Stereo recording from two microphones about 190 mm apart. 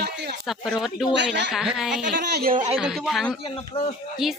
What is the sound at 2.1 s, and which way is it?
Speech, 50° right (ahead or behind).